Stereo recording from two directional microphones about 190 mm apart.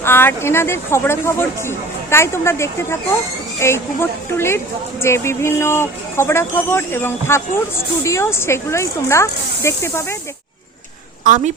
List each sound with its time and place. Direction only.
0.0 s speech: 10° left (ahead or behind)
11.2 s a woman's voice: 40° right (ahead or behind)